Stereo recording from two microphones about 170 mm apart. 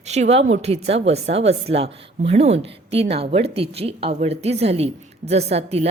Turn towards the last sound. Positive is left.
turn(degrees=-35)  # may be behind; listen again after turning